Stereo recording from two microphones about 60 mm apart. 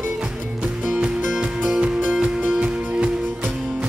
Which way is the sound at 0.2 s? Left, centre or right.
Centre.